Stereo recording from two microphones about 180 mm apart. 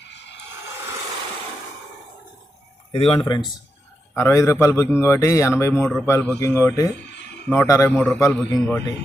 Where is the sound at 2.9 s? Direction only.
35° left (ahead or behind).